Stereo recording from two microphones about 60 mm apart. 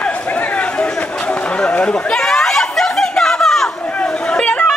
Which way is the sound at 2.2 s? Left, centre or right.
Centre.